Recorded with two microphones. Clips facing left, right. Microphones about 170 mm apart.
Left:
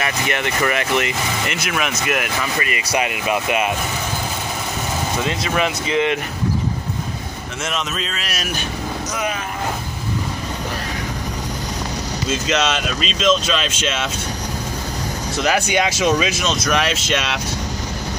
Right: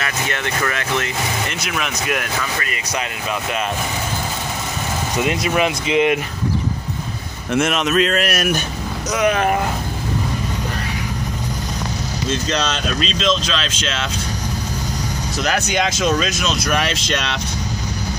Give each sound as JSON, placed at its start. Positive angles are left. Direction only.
{"t": 0.0, "sound": "speech", "side_deg": 15}
{"t": 5.2, "sound": "speech", "side_deg": -15}
{"t": 7.5, "sound": "a man's voice", "side_deg": -60}
{"t": 9.1, "sound": "speech", "side_deg": -80}
{"t": 13.0, "sound": "speech", "side_deg": 5}
{"t": 15.3, "sound": "speech", "side_deg": 5}